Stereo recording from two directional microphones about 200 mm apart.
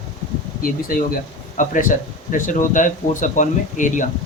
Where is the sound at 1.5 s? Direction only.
40° left (ahead or behind).